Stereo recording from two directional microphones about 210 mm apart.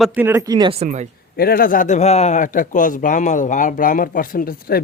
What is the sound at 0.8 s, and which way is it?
Speech, 35° right (ahead or behind).